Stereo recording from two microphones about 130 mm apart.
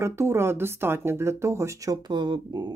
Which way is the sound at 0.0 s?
20° right (ahead or behind).